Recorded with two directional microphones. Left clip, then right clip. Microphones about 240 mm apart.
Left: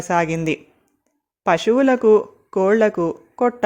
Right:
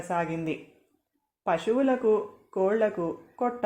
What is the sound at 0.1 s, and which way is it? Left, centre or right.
Speech, left.